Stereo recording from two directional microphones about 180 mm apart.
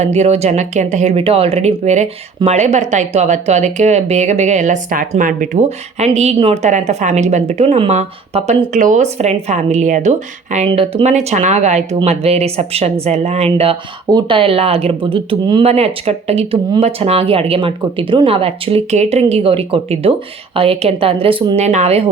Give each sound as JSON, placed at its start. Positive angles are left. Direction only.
{"t": 0.0, "sound": "speech", "side_deg": -35}